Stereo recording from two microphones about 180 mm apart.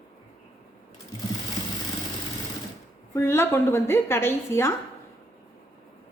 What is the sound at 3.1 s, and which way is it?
A woman's voice, 15° left (ahead or behind).